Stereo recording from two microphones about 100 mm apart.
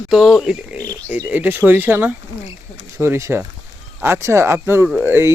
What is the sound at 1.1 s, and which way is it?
Speech, 15° right (ahead or behind).